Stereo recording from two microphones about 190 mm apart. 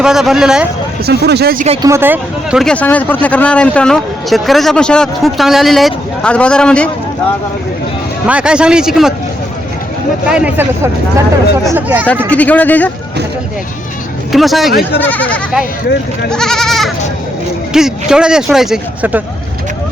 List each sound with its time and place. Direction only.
0.0 s speech: centre (ahead or behind)
1.0 s speech: 60° right (ahead or behind)
1.8 s speech: 15° right (ahead or behind); by 6.9 s 5° left (ahead or behind)
8.3 s speech: 5° right (ahead or behind)
10.2 s speech: 5° right (ahead or behind)
11.7 s speech: 10° right (ahead or behind)
12.3 s a man's voice: 10° left (ahead or behind)
14.3 s a man's voice: centre (ahead or behind)
16.3 s goat: centre (ahead or behind)
17.7 s speech: 5° right (ahead or behind)